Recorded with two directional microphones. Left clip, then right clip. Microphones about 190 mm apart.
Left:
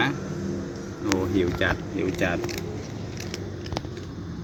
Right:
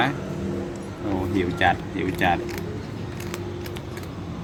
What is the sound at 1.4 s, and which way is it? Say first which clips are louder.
Speech: right 3 dB; 15° right (ahead or behind).